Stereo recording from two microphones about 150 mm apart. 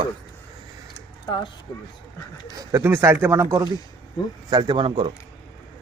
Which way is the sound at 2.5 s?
15° right (ahead or behind).